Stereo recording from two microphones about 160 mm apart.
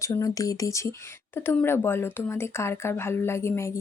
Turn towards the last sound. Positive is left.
turn(degrees=15)  # may be behind; listen again after turning